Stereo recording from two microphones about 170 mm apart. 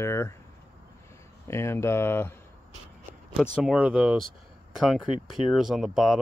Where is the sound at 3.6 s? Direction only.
5° right (ahead or behind).